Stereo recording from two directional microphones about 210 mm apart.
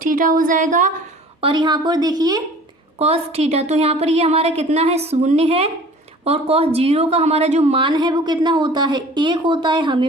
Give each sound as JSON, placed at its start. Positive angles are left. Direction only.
{"t": 0.0, "sound": "speech", "side_deg": -40}
{"t": 1.4, "sound": "a woman's voice", "side_deg": -25}
{"t": 3.0, "sound": "a woman's voice", "side_deg": -30}